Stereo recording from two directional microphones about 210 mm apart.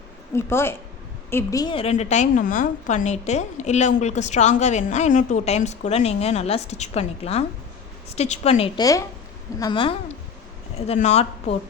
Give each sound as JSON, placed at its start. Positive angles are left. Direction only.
{"t": 0.3, "sound": "a woman's voice", "side_deg": 10}
{"t": 10.8, "sound": "a woman's voice", "side_deg": 30}